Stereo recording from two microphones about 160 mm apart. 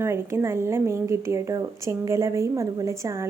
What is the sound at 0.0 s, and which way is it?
A woman's voice, 15° right (ahead or behind).